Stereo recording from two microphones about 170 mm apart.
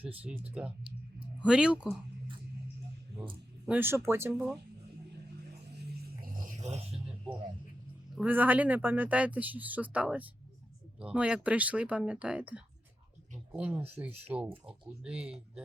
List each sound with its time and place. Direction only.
0.0 s speech: 10° right (ahead or behind)
3.7 s speech: 15° right (ahead or behind)
6.2 s a sound: 50° right (ahead or behind)
8.1 s speech: 10° right (ahead or behind)